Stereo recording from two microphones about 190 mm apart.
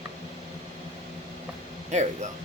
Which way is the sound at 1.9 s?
40° right (ahead or behind).